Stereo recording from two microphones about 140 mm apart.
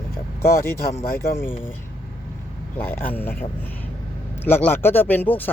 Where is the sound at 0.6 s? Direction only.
20° left (ahead or behind).